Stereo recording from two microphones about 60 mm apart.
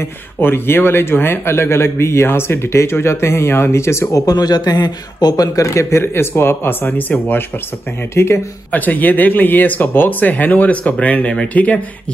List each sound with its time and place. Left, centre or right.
0.4 s speech: left
4.3 s speech: left
5.3 s speech: left
8.1 s speech: left
8.7 s speech: left